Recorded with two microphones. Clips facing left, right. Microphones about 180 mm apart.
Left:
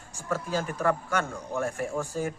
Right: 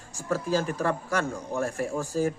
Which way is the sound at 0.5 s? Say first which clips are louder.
Even; 35° right (ahead or behind).